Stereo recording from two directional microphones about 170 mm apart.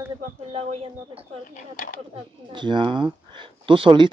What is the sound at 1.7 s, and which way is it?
Speech, 55° left (ahead or behind).